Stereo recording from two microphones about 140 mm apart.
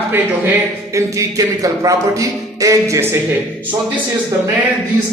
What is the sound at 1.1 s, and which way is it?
A man's voice, 25° right (ahead or behind).